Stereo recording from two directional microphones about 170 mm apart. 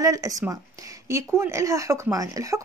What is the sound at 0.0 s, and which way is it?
A woman's voice, 20° right (ahead or behind).